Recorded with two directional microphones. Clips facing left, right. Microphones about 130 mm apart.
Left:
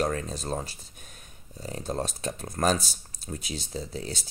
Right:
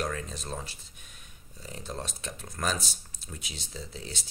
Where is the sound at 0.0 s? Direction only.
35° left (ahead or behind).